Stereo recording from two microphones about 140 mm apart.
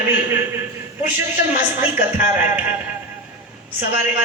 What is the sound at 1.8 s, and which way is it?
Speech, 15° right (ahead or behind).